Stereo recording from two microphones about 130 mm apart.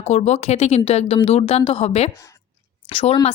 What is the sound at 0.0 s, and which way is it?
Speech, 55° left (ahead or behind).